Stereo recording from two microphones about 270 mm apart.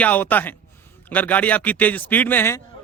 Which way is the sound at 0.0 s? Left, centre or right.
Centre.